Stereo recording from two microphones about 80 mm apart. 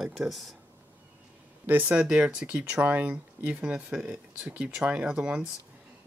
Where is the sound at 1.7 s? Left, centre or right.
Right.